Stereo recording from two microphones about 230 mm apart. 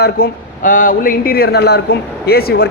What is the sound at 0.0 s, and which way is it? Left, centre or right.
Speech, left.